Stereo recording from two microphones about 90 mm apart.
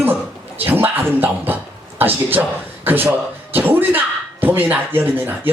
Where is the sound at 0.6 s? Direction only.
25° right (ahead or behind).